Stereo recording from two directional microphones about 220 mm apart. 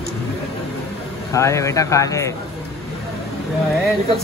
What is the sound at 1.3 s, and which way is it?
Speech, 15° left (ahead or behind).